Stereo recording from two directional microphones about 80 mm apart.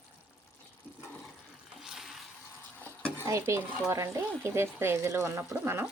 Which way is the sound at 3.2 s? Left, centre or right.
Right.